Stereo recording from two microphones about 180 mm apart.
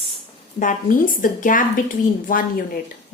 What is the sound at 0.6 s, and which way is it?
A woman's voice, 45° left (ahead or behind).